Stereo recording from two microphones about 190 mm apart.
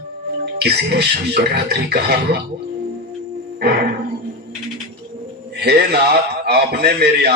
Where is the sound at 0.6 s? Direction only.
60° right (ahead or behind).